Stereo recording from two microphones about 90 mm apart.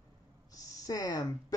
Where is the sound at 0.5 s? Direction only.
40° left (ahead or behind).